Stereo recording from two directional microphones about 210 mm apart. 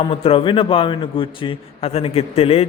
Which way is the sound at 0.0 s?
25° left (ahead or behind).